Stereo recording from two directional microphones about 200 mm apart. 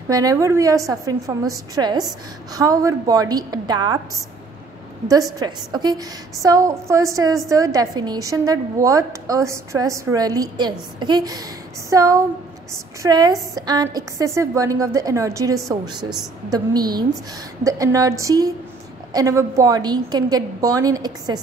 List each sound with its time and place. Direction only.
0.1 s a woman's voice: 15° right (ahead or behind)
5.0 s a woman's voice: 20° right (ahead or behind)